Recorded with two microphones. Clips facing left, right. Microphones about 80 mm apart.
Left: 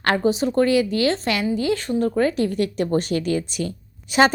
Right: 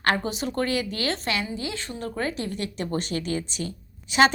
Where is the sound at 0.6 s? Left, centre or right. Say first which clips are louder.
Left 9 dB; right.